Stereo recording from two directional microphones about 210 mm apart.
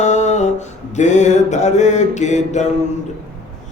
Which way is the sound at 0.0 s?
35° left (ahead or behind).